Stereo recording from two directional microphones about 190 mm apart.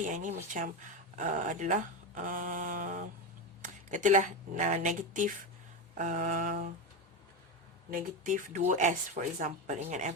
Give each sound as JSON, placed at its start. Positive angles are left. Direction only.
{"t": 0.0, "sound": "speech", "side_deg": -40}
{"t": 5.9, "sound": "a sound", "side_deg": -40}
{"t": 7.9, "sound": "speech", "side_deg": -45}